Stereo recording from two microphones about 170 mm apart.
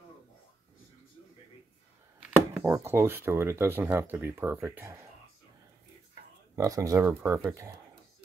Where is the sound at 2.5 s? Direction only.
15° right (ahead or behind).